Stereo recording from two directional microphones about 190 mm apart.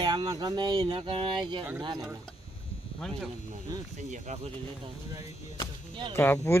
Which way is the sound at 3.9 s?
40° right (ahead or behind).